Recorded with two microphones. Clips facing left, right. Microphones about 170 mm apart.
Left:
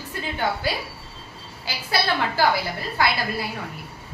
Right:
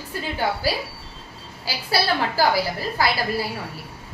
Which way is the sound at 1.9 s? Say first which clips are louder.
Right 1 dB; 35° right (ahead or behind).